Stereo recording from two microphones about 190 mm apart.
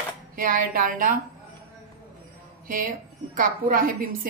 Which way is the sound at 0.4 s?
45° right (ahead or behind).